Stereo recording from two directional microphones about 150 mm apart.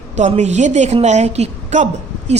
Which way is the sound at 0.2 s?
50° right (ahead or behind).